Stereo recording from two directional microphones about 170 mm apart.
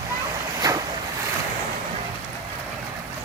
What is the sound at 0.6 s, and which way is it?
Waves, 20° right (ahead or behind).